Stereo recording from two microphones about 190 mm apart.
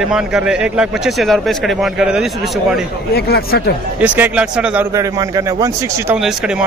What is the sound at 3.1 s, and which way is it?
Speech, 55° left (ahead or behind).